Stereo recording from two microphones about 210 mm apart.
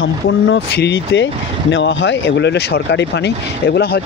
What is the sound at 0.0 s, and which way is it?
Speech, 60° left (ahead or behind).